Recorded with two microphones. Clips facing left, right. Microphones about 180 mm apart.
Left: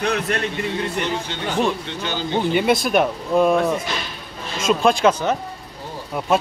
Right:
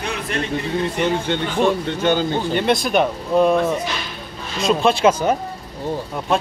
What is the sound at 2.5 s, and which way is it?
A man's voice, 5° left (ahead or behind).